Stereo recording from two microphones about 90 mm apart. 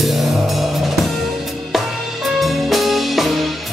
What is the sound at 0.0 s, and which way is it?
Music, centre (ahead or behind).